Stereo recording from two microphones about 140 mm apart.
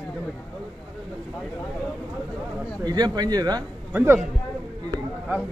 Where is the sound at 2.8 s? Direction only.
30° right (ahead or behind).